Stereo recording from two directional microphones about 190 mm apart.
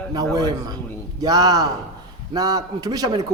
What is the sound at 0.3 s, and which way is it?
A man's voice, 20° right (ahead or behind).